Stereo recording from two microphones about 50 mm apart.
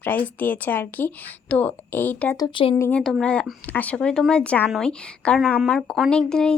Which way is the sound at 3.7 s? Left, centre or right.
Left.